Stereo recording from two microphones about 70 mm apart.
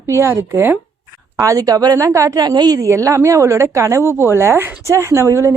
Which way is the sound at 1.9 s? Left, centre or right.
Right.